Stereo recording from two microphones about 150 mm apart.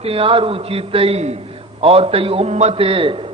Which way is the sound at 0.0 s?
40° right (ahead or behind).